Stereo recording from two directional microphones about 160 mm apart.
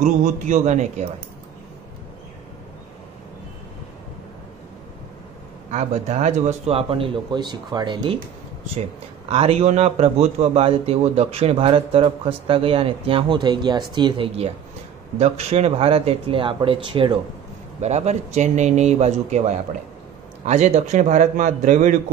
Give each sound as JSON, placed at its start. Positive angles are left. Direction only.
{"t": 0.0, "sound": "speech", "side_deg": -45}
{"t": 5.7, "sound": "a man's voice", "side_deg": -45}
{"t": 9.3, "sound": "a man's voice", "side_deg": -40}
{"t": 17.7, "sound": "speech", "side_deg": -45}